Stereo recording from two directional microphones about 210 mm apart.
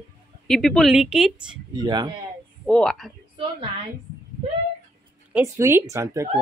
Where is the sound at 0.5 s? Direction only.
Centre (ahead or behind).